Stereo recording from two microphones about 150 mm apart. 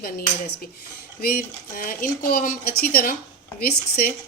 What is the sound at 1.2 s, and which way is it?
Speech, 75° left (ahead or behind).